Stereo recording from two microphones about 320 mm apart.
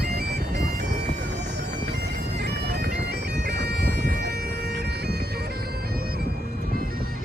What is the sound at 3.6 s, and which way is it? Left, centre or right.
Bagpipes, right.